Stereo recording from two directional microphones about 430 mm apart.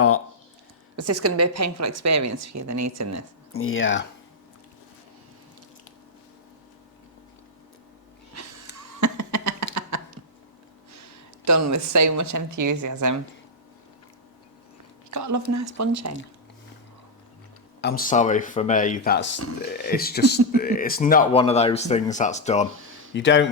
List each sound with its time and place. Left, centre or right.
0.9 s a woman's voice: right
3.5 s speech: left
9.0 s a sound: right
11.4 s a woman's voice: right
15.1 s a woman's voice: right
17.7 s speech: left